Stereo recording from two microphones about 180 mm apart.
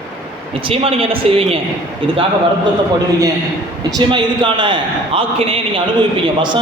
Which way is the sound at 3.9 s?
25° right (ahead or behind).